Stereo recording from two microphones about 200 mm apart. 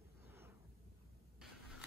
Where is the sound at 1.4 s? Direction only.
Centre (ahead or behind).